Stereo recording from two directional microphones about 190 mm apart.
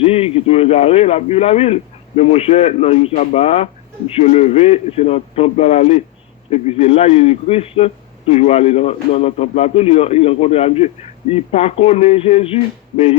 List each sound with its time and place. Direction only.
0.0 s a man's voice: 30° left (ahead or behind)